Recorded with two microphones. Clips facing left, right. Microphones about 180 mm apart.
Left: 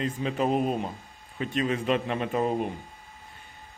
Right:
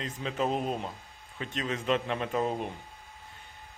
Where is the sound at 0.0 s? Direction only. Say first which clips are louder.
Left 4 dB; 5° left (ahead or behind).